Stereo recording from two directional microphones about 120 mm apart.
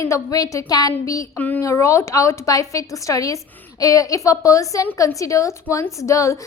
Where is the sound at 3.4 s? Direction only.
15° left (ahead or behind).